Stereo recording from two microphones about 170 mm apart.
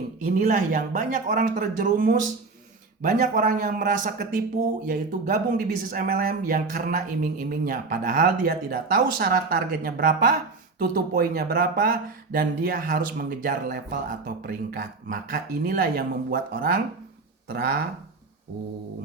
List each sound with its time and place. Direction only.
0.3 s a man's voice: 50° right (ahead or behind)